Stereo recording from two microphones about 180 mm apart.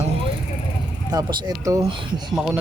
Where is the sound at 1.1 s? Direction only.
20° right (ahead or behind).